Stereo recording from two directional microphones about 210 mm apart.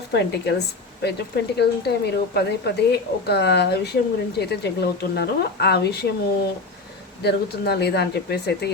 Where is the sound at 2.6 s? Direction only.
50° left (ahead or behind).